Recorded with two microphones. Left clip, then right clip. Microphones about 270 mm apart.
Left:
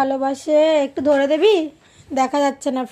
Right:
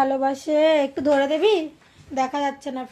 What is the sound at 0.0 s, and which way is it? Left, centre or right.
A woman's voice, centre.